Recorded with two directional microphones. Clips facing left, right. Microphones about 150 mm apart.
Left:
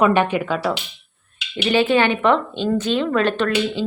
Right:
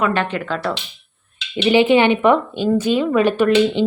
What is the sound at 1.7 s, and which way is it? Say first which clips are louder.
A woman's voice: right 4 dB; 15° right (ahead or behind).